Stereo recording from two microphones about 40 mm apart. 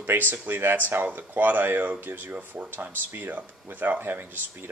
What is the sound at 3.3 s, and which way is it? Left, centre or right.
Speech, right.